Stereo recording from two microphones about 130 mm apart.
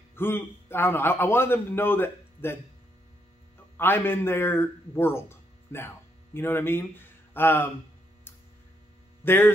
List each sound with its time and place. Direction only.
0.1 s a man's voice: 15° left (ahead or behind)
3.7 s a man's voice: 15° left (ahead or behind)
9.2 s speech: 15° left (ahead or behind)